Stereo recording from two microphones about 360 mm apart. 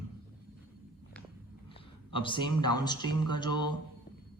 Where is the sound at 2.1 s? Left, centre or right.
Centre.